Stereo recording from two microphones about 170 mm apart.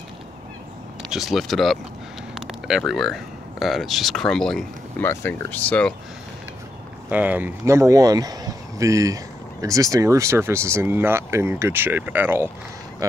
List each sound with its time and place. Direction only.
1.1 s speech: centre (ahead or behind)
7.1 s speech: 10° right (ahead or behind)